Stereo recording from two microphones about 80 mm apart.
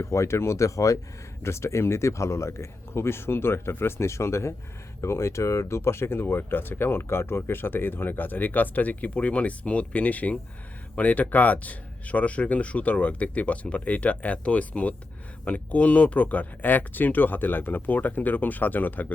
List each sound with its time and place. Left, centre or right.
0.0 s speech: left